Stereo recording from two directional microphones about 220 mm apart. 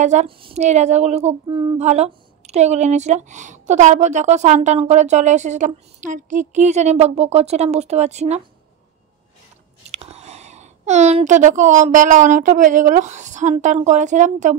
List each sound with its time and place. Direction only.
0.0 s speech: 30° right (ahead or behind)
9.8 s a child's voice: 30° right (ahead or behind)